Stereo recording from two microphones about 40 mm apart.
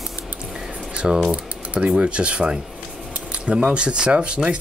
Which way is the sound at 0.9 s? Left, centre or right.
Right.